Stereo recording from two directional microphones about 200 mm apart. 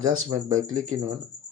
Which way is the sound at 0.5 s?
40° right (ahead or behind).